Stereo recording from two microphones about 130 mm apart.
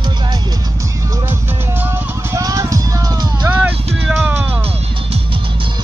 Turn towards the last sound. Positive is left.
turn(degrees=-15)  # may be behind; listen again after turning